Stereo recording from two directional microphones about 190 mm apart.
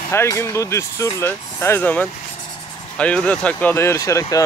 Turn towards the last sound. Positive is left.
turn(degrees=15)  # may be behind; listen again after turning